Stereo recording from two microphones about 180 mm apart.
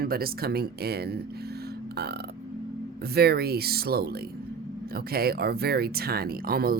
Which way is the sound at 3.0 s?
60° right (ahead or behind).